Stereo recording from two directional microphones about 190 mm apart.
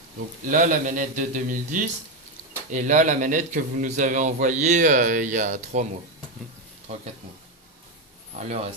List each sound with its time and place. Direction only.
0.5 s a man's voice: 45° right (ahead or behind)
8.4 s a man's voice: 35° right (ahead or behind)